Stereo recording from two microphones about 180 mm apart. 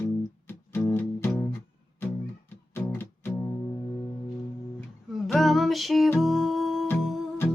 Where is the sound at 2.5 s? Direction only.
10° left (ahead or behind).